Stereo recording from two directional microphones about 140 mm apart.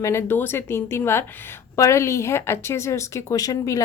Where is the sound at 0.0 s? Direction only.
20° left (ahead or behind).